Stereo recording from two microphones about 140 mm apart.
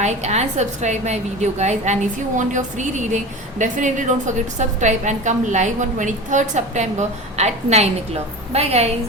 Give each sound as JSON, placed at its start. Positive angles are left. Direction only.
{"t": 0.0, "sound": "a woman's voice", "side_deg": -55}